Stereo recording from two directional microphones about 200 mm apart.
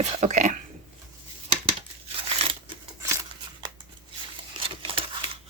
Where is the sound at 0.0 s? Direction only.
35° right (ahead or behind).